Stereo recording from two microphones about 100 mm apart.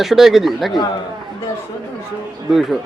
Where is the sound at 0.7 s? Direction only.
45° left (ahead or behind).